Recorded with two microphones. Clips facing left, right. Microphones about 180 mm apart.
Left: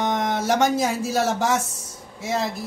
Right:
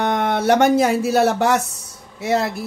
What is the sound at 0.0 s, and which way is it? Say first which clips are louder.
Speech: right 4 dB; 65° right (ahead or behind).